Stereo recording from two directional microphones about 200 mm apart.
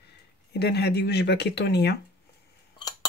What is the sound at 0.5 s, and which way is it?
Speech, 55° left (ahead or behind).